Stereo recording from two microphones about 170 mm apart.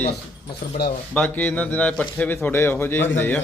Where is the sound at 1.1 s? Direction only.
10° left (ahead or behind).